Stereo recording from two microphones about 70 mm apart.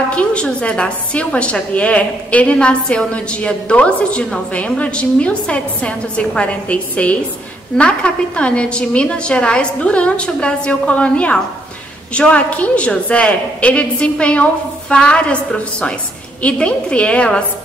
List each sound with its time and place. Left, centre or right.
0.1 s a woman's voice: centre